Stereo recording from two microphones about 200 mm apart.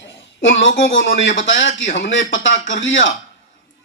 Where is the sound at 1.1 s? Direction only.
70° left (ahead or behind).